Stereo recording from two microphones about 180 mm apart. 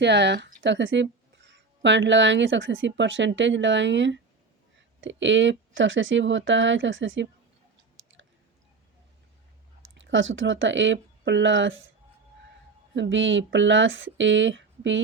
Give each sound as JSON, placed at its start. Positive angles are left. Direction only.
{"t": 0.0, "sound": "speech", "side_deg": -75}
{"t": 10.0, "sound": "speech", "side_deg": -90}
{"t": 12.9, "sound": "speech", "side_deg": -90}